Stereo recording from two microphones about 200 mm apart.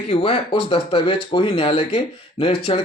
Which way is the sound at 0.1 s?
25° left (ahead or behind).